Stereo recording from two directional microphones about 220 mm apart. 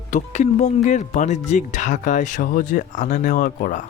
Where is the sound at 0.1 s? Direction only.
35° left (ahead or behind).